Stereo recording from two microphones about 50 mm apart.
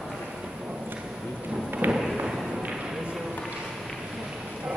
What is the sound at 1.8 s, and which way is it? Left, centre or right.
Thump, right.